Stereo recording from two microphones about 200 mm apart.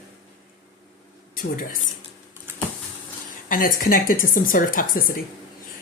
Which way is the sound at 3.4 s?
45° left (ahead or behind).